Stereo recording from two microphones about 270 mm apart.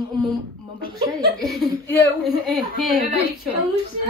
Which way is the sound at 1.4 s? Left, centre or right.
Centre.